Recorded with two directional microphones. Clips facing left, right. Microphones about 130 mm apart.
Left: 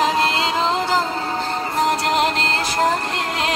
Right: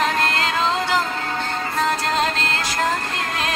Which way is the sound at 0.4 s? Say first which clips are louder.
Left 2 dB; 25° left (ahead or behind).